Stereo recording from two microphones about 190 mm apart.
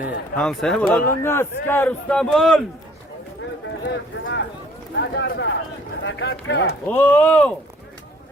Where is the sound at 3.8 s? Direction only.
70° left (ahead or behind).